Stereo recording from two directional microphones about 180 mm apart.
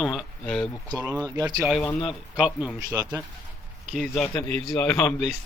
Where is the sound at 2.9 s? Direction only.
20° right (ahead or behind).